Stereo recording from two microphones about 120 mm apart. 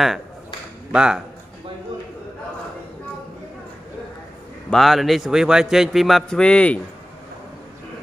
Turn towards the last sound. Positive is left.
turn(degrees=10)  # may be behind; listen again after turning